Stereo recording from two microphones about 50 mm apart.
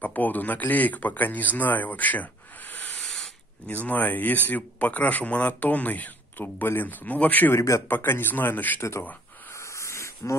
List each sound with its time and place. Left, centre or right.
0.0 s speech: left
3.6 s speech: left
7.5 s a man's voice: left
7.9 s speech: left
9.8 s a sound: left